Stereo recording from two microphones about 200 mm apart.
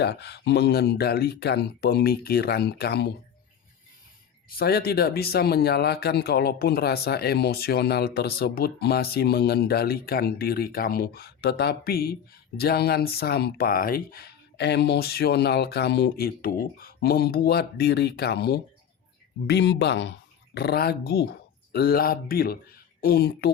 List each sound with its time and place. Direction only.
0.0 s speech: 55° left (ahead or behind)
4.4 s speech: 50° left (ahead or behind)